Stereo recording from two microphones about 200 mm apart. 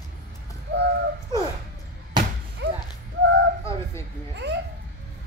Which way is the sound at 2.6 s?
60° right (ahead or behind).